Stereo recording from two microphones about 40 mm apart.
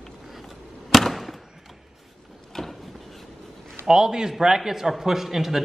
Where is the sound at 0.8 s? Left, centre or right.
Centre.